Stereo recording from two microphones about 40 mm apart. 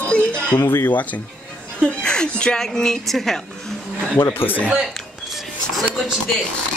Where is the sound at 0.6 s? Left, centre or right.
Left.